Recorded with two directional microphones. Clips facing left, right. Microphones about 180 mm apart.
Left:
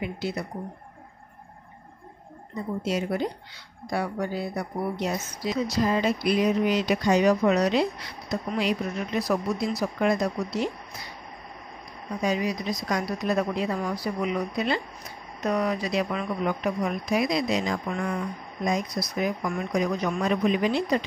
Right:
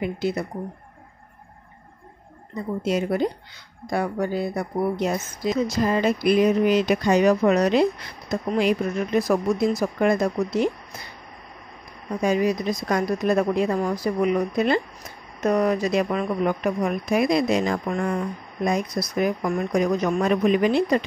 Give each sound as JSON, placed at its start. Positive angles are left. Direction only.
{"t": 0.0, "sound": "speech", "side_deg": -50}
{"t": 2.8, "sound": "speech", "side_deg": -55}
{"t": 12.2, "sound": "speech", "side_deg": -50}